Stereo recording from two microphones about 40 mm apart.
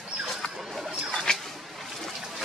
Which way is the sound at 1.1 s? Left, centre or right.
Centre.